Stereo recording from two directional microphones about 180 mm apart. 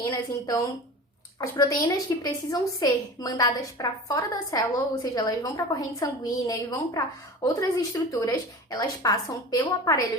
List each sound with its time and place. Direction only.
0.0 s a woman's voice: 20° left (ahead or behind)